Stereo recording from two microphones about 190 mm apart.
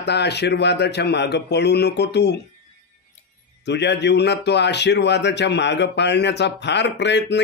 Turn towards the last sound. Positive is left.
turn(degrees=65)  # may be behind; listen again after turning